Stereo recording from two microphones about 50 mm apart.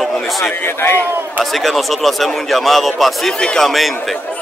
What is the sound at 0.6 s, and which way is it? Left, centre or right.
Speech, left.